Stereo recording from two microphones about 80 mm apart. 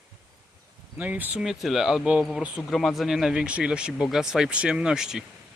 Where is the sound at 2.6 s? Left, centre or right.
Centre.